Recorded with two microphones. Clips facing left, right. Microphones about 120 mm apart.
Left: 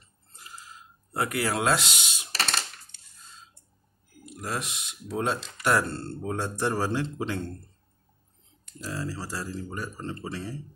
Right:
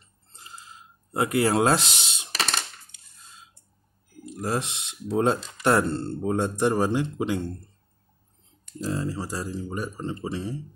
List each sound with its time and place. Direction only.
0.3 s a sound: 25° right (ahead or behind)
4.3 s speech: 30° right (ahead or behind)
8.8 s speech: 20° right (ahead or behind)